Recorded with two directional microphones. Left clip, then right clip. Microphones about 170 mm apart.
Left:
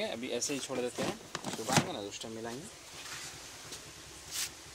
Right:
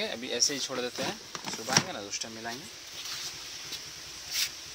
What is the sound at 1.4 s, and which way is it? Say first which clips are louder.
Speech: right 3 dB; 90° left.